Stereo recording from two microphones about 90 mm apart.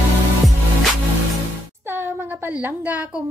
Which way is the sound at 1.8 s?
25° right (ahead or behind).